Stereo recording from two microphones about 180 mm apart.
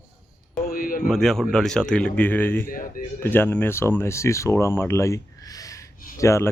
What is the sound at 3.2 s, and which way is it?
Speech, 10° left (ahead or behind).